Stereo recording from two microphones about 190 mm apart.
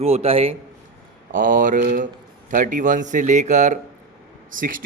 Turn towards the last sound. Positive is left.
turn(degrees=-45)  # may be behind; listen again after turning